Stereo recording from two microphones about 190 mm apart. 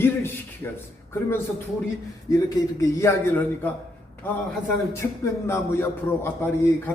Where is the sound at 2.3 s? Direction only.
20° left (ahead or behind).